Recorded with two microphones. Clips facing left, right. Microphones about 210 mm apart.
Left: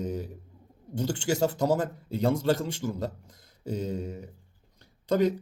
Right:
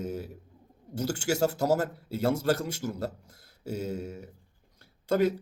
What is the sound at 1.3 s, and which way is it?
Speech, 40° right (ahead or behind).